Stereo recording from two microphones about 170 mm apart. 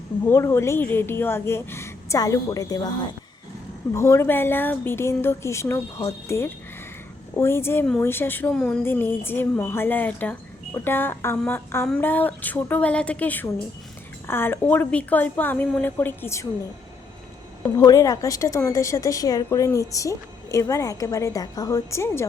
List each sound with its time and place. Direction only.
0.3 s speech: 15° left (ahead or behind)
3.9 s speech: 15° left (ahead or behind)
17.7 s a woman's voice: 20° left (ahead or behind)